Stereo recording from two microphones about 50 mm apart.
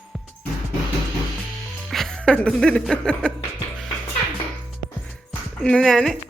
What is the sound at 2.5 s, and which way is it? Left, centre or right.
Speech, centre.